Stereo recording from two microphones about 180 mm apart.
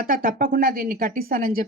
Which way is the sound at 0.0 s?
55° right (ahead or behind).